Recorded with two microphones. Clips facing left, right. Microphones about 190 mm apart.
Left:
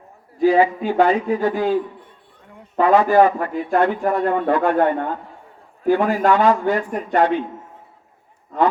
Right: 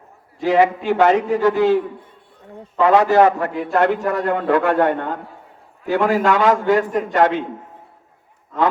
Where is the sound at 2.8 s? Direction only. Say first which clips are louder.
Right 1 dB; 80° right.